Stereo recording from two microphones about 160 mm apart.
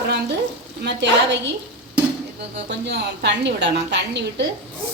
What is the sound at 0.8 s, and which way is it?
Speech, 90° right.